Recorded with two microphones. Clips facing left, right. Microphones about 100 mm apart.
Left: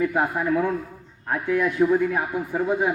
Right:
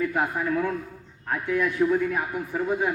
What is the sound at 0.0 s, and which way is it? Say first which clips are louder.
A man's voice: left 3 dB; 20° left (ahead or behind).